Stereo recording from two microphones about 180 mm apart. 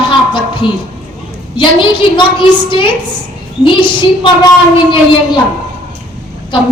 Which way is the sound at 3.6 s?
25° left (ahead or behind).